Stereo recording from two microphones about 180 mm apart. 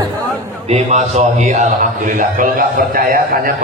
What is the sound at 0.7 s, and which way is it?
A man's voice, 40° right (ahead or behind).